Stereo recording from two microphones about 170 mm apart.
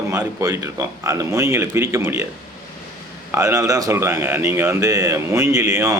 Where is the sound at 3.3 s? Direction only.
15° right (ahead or behind).